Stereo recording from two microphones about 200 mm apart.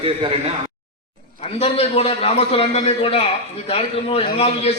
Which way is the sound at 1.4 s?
30° left (ahead or behind).